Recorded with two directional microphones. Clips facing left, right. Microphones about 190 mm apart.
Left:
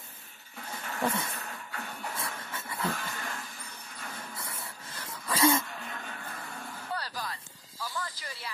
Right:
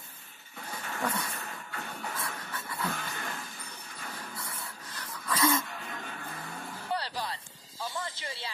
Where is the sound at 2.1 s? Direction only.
25° left (ahead or behind).